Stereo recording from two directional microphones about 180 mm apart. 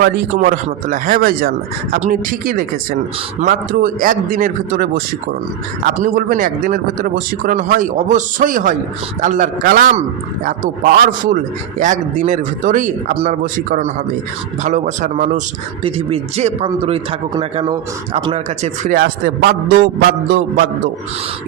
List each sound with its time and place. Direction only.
0.0 s speech: 50° right (ahead or behind)
15.8 s speech: 30° right (ahead or behind); by 19.8 s 60° right (ahead or behind)